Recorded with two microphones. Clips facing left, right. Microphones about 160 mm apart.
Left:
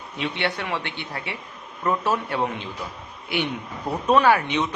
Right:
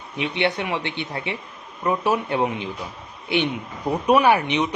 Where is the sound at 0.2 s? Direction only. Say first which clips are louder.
Right 4 dB; 20° right (ahead or behind).